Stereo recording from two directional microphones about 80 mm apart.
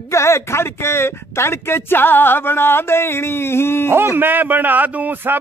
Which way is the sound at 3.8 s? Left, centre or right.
Right.